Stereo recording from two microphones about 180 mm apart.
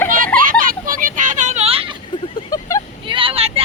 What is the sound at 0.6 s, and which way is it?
Vehicle, 50° right (ahead or behind).